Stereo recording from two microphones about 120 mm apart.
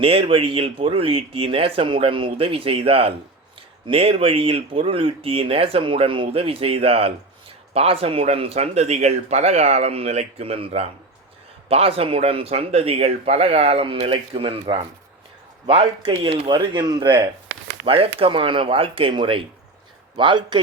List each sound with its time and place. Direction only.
0.0 s speech: 50° right (ahead or behind)
17.8 s speech: 50° right (ahead or behind)